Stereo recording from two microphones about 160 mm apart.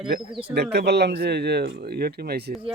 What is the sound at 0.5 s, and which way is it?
Speech, 90° right.